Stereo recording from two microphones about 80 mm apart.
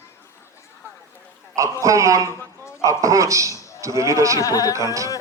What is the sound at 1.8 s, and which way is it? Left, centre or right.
A man's voice, right.